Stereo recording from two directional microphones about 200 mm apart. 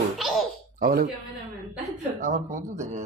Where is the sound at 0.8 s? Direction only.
45° right (ahead or behind).